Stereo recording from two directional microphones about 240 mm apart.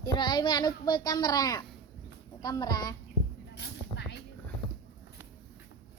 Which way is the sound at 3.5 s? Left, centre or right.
Left.